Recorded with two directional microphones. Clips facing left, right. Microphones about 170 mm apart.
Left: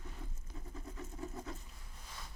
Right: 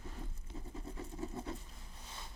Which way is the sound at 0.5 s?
25° right (ahead or behind).